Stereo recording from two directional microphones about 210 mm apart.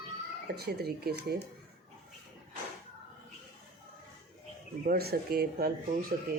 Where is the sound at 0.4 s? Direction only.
50° right (ahead or behind).